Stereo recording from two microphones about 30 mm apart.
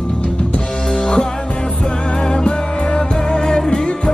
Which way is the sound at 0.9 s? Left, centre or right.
Left.